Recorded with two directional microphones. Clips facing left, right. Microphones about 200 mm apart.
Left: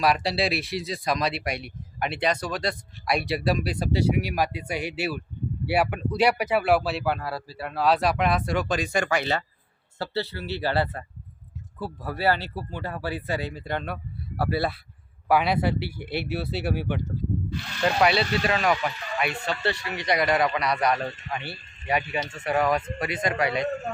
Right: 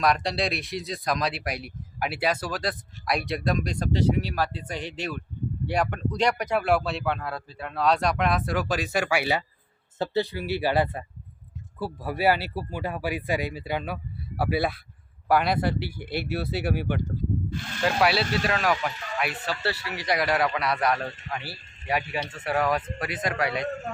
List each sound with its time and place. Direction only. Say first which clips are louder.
0.0 s a man's voice: left 1 dB; 5° left (ahead or behind)
17.5 s speech: even; 50° right (ahead or behind)
17.8 s speech: left 1 dB; centre (ahead or behind)